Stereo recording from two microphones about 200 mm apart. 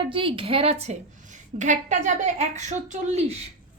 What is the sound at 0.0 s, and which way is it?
A woman's voice, 25° right (ahead or behind).